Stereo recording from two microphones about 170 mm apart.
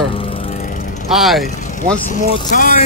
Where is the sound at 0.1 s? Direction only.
30° left (ahead or behind).